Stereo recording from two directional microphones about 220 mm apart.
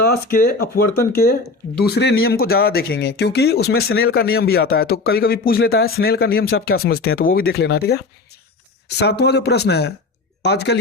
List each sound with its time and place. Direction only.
0.1 s speech: 45° left (ahead or behind)